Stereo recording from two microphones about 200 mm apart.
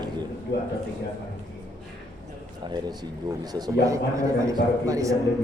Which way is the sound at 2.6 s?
20° right (ahead or behind).